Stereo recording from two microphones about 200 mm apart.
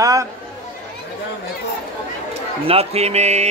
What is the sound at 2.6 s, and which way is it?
Music, 30° right (ahead or behind).